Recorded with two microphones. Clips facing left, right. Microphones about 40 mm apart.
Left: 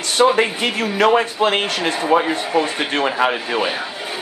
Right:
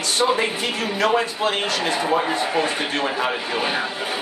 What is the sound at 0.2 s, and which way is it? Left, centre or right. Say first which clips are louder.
Speech: left 6 dB; left.